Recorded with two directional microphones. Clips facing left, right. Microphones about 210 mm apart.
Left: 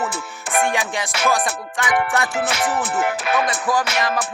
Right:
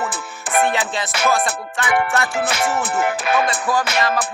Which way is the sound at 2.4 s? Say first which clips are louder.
Right 1 dB; 45° right (ahead or behind).